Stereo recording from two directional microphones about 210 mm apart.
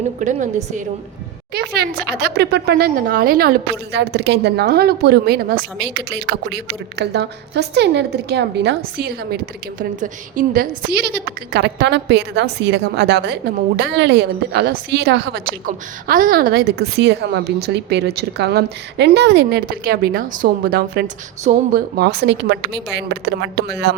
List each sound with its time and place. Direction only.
0.2 s a woman's voice: 35° right (ahead or behind)
1.5 s a woman's voice: 50° right (ahead or behind)